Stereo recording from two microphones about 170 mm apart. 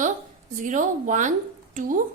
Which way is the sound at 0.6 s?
50° right (ahead or behind).